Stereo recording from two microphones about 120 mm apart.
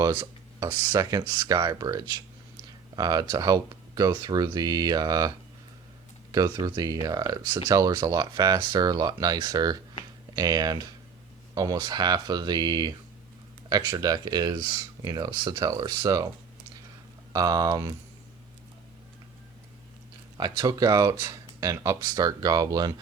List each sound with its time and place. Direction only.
0.2 s speech: 30° right (ahead or behind)
6.3 s speech: 35° right (ahead or behind)
17.3 s speech: 30° right (ahead or behind)
20.4 s speech: 35° right (ahead or behind)